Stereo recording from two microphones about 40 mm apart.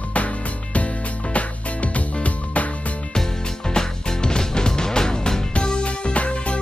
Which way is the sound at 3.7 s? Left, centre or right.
Centre.